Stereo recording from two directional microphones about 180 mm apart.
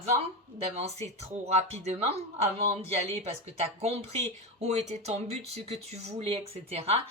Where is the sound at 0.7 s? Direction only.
35° right (ahead or behind).